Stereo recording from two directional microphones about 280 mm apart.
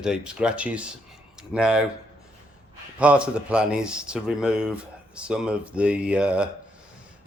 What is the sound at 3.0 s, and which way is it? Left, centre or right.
Speech, centre.